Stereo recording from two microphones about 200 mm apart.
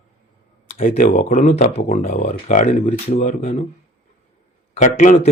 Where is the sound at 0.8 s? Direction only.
45° left (ahead or behind).